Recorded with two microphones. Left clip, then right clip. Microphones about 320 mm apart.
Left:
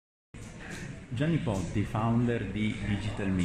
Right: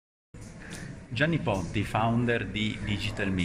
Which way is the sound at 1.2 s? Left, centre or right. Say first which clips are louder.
Right 4 dB; right.